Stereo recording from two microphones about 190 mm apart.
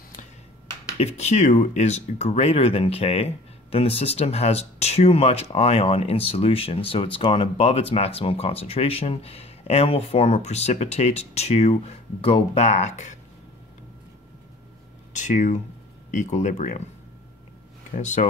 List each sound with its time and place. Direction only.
0.9 s speech: 35° left (ahead or behind)
15.1 s speech: 40° left (ahead or behind)
17.9 s speech: 40° left (ahead or behind)